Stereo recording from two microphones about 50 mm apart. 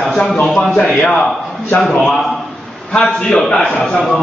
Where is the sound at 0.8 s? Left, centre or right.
Left.